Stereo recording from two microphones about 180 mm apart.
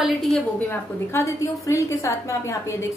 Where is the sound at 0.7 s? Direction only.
15° left (ahead or behind).